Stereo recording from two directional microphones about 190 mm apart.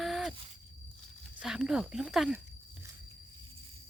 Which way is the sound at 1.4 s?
5° right (ahead or behind).